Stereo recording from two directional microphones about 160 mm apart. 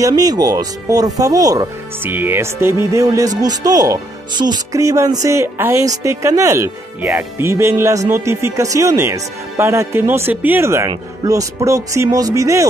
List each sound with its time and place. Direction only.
0.0 s speech: 25° right (ahead or behind)